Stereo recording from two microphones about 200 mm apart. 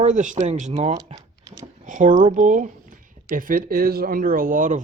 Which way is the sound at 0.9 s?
20° right (ahead or behind).